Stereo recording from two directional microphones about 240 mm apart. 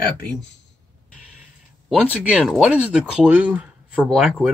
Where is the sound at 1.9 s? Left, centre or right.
Centre.